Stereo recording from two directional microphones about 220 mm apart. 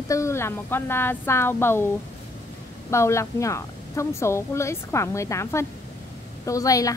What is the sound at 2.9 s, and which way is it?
A woman's voice, 10° left (ahead or behind).